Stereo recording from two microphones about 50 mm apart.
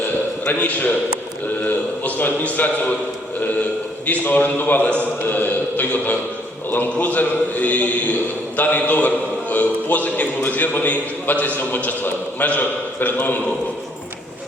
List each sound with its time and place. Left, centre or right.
0.4 s a man's voice: left
1.6 s a sound: left
4.0 s a man's voice: left